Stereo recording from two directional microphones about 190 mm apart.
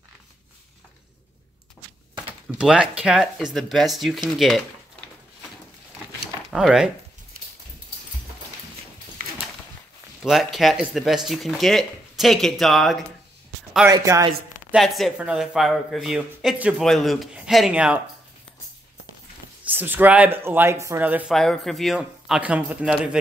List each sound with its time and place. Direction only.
2.5 s speech: 5° right (ahead or behind)
6.5 s speech: centre (ahead or behind)
9.2 s a sound: 45° right (ahead or behind)
10.2 s speech: centre (ahead or behind)
13.8 s speech: 15° right (ahead or behind)
14.7 s speech: centre (ahead or behind)
19.6 s speech: 10° right (ahead or behind)
21.4 s speech: centre (ahead or behind)